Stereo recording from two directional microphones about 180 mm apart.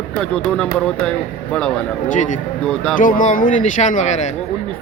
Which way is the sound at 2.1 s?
45° left (ahead or behind).